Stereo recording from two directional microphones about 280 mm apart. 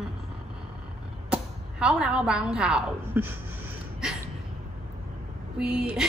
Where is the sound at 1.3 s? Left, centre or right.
Centre.